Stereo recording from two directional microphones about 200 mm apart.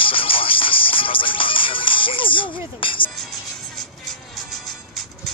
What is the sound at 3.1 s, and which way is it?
Music, centre (ahead or behind).